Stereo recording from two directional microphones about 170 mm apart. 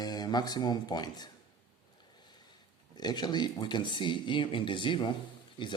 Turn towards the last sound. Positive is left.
turn(degrees=30)  # may be behind; listen again after turning